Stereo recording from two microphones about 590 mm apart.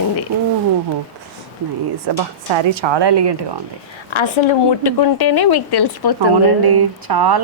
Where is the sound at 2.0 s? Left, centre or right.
Right.